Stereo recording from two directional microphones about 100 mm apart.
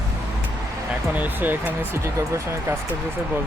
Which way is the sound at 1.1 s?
15° right (ahead or behind).